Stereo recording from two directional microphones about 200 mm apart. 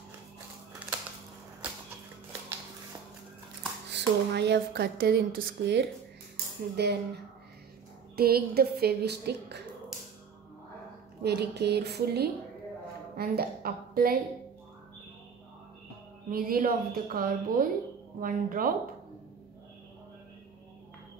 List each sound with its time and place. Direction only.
3.9 s speech: 60° right (ahead or behind)
6.3 s cutlery: 55° right (ahead or behind)
8.2 s a woman's voice: 50° right (ahead or behind)
11.2 s a woman's voice: 55° right (ahead or behind)
16.3 s a woman's voice: 45° right (ahead or behind)